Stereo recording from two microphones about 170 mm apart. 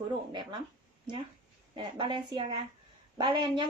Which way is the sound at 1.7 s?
30° right (ahead or behind).